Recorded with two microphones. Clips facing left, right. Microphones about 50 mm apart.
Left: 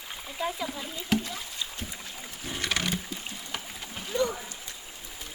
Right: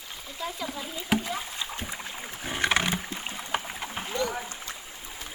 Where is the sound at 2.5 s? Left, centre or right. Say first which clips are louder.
Right 4 dB; right.